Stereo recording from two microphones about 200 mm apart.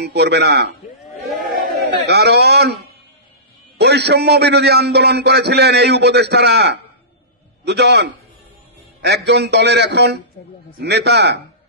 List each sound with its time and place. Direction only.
0.0 s a man's voice: 55° right (ahead or behind)